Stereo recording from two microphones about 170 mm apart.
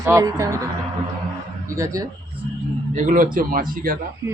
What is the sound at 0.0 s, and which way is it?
Speech, 20° right (ahead or behind).